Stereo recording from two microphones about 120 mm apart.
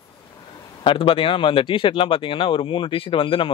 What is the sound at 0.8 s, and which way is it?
Speech, 45° left (ahead or behind).